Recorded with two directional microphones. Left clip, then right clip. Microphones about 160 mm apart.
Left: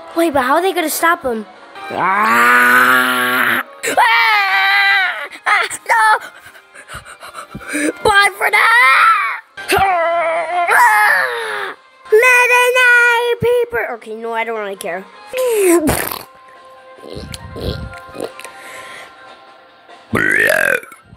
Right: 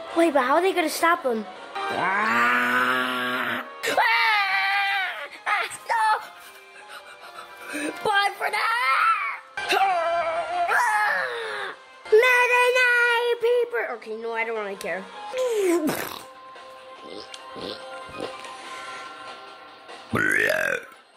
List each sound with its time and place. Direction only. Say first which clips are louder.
0.1 s a woman's voice: left 6 dB; 25° left (ahead or behind)
2.0 s music: left 10 dB; 40° left (ahead or behind)
3.8 s screaming: left 8 dB; 35° left (ahead or behind)
7.6 s a sound: left 11 dB; 45° left (ahead or behind); by 15.0 s 30° left (ahead or behind)
15.3 s speech: left 10 dB; 45° left (ahead or behind)
17.3 s music: left 9 dB; 35° left (ahead or behind)
20.1 s burping: left 9 dB; 25° left (ahead or behind)